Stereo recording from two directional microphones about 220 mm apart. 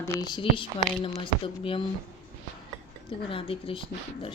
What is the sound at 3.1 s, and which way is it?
A woman's voice, 25° left (ahead or behind).